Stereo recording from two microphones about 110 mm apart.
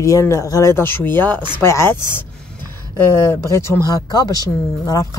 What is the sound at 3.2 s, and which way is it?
Speech, 25° left (ahead or behind).